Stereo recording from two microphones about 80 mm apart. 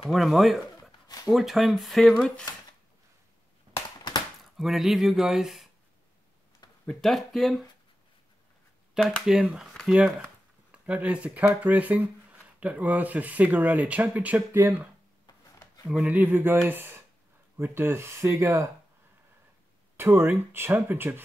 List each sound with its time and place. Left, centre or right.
0.1 s speech: centre
1.0 s a sound: left
1.3 s speech: centre
4.6 s speech: centre
6.6 s a sound: left
7.0 s speech: centre
9.2 s speech: centre; by 14.9 s right
15.2 s a sound: left
15.9 s speech: centre; by 18.7 s right
20.0 s speech: right